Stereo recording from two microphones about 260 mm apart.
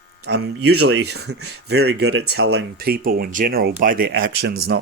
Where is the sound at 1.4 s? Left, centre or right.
Right.